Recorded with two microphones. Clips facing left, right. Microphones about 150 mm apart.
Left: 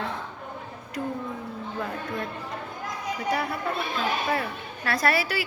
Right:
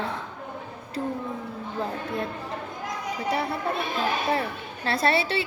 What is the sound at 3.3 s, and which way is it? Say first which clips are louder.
Speech: right 1 dB; 25° right (ahead or behind).